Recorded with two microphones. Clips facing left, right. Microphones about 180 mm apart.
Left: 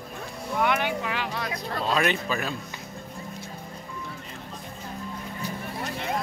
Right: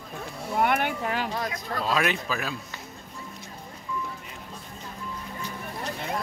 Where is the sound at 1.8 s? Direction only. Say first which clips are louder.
Left 1 dB; centre (ahead or behind).